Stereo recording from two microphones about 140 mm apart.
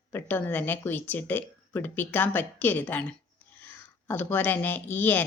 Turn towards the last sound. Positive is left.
turn(degrees=15)  # may be behind; listen again after turning